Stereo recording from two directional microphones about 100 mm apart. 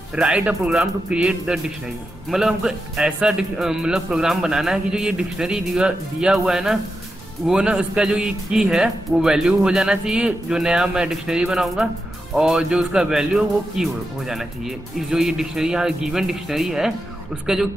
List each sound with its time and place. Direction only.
0.1 s a man's voice: 10° right (ahead or behind)